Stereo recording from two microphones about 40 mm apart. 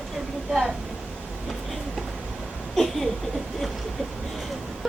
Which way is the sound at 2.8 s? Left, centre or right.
Centre.